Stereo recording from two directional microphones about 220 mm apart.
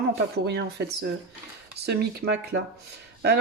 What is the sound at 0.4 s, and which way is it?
Speech, 50° right (ahead or behind).